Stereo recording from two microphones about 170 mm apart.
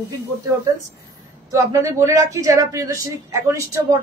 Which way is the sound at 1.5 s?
20° right (ahead or behind).